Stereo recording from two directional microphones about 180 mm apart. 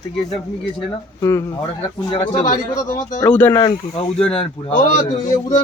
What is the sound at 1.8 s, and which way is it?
Speech, 30° left (ahead or behind).